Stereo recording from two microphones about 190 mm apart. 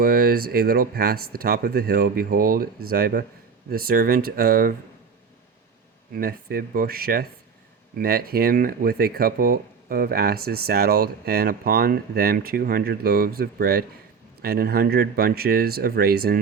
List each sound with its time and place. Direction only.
0.0 s speech: 50° right (ahead or behind)
6.1 s speech: 50° right (ahead or behind)